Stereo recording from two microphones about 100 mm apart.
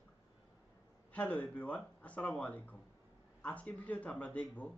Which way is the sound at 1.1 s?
15° left (ahead or behind).